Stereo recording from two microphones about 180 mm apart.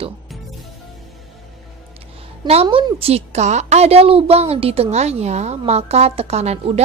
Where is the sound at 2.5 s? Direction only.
30° right (ahead or behind).